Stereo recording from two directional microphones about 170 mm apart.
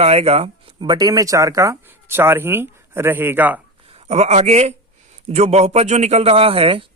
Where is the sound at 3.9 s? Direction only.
35° right (ahead or behind).